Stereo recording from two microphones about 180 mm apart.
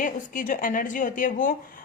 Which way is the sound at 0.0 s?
45° left (ahead or behind).